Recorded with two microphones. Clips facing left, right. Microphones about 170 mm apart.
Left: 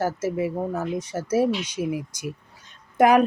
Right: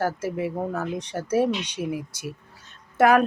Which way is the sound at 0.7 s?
10° left (ahead or behind).